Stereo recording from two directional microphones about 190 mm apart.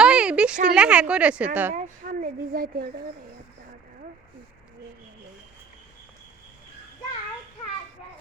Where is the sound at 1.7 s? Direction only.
40° right (ahead or behind).